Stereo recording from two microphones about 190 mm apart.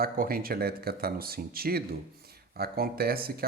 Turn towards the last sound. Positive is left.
turn(degrees=-50)  # may be behind; listen again after turning